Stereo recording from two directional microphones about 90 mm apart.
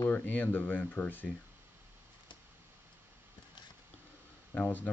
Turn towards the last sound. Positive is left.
turn(degrees=20)  # may be behind; listen again after turning